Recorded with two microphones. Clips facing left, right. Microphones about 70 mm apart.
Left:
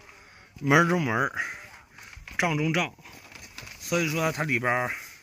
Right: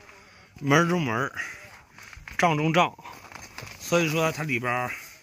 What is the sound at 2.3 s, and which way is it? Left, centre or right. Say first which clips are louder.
Speech: right 5 dB; centre.